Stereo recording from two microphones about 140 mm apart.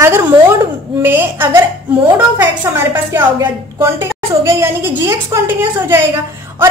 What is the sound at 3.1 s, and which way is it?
A woman's voice, 15° right (ahead or behind).